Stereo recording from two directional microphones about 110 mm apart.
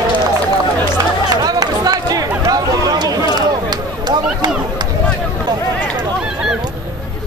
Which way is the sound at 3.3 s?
40° right (ahead or behind).